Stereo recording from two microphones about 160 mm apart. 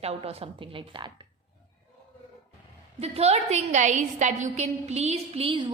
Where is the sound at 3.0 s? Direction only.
40° right (ahead or behind).